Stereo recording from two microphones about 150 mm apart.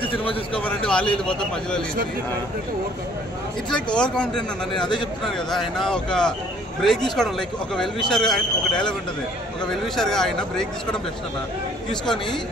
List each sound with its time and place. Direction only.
0.0 s a man's voice: 35° left (ahead or behind)
0.6 s a man's voice: 5° left (ahead or behind)
3.7 s speech: 5° left (ahead or behind)
4.7 s a man's voice: 30° left (ahead or behind)
5.2 s speech: centre (ahead or behind)
9.7 s speech: 5° left (ahead or behind)